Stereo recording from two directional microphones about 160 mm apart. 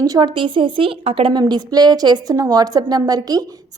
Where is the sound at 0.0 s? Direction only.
25° right (ahead or behind).